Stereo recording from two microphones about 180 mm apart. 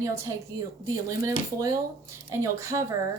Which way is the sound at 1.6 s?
20° right (ahead or behind).